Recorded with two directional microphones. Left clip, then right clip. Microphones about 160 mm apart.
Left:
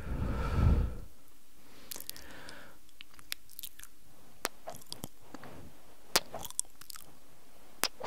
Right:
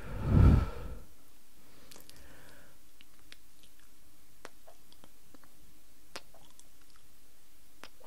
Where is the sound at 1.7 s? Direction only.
15° left (ahead or behind).